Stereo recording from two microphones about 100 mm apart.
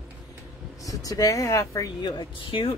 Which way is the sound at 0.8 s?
35° left (ahead or behind).